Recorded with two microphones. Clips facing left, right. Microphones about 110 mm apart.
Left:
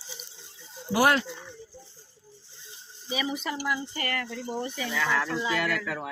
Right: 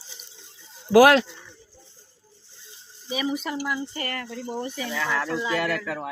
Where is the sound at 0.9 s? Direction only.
90° right.